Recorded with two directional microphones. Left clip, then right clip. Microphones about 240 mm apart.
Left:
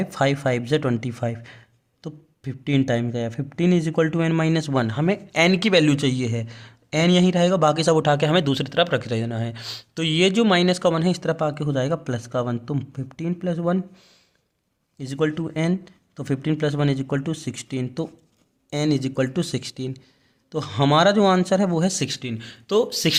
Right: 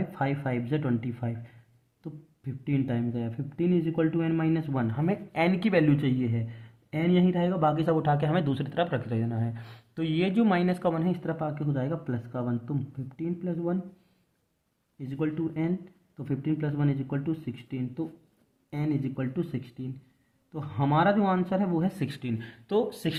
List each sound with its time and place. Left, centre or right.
0.1 s speech: left
14.9 s speech: left